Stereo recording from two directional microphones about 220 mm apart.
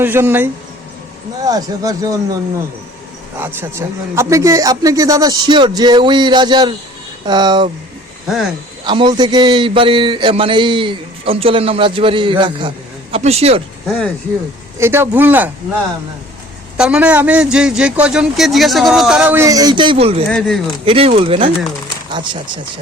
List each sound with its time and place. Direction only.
0.0 s speech: 10° right (ahead or behind)
3.3 s a man's voice: 10° right (ahead or behind)
8.8 s a man's voice: 20° right (ahead or behind)
13.8 s a man's voice: 5° left (ahead or behind)
14.8 s speech: 10° right (ahead or behind)
16.7 s a man's voice: 5° right (ahead or behind); by 20.2 s 25° right (ahead or behind)
20.2 s a man's voice: 5° left (ahead or behind)
20.8 s a man's voice: 25° right (ahead or behind)